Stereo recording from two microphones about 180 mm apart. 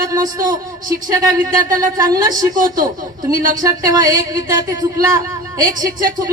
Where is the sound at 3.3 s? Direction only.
50° right (ahead or behind).